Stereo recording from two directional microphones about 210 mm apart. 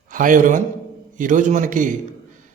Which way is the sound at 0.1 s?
40° right (ahead or behind).